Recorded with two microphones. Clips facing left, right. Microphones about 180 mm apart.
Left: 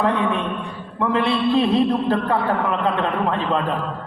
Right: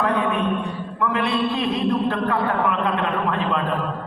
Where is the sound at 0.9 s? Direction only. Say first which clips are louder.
Left 3 dB; 30° left (ahead or behind).